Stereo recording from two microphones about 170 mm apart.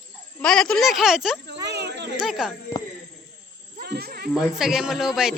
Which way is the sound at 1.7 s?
85° right.